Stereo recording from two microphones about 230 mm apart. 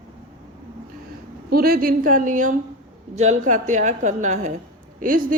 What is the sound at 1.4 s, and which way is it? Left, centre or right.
Speech, right.